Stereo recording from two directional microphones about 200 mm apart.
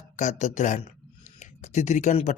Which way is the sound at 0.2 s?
35° left (ahead or behind).